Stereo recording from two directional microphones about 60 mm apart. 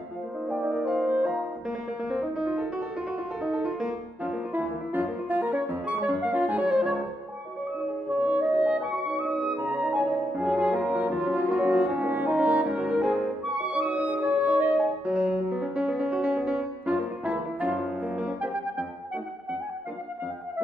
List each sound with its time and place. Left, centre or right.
0.6 s music: centre
2.0 s music: centre
4.6 s music: right
8.1 s clarinet: right
9.6 s music: right
11.2 s french horn: centre
14.8 s music: centre
16.8 s music: right